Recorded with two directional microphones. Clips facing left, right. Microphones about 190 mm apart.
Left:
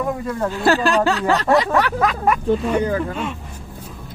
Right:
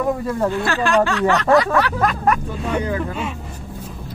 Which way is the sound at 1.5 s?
20° left (ahead or behind).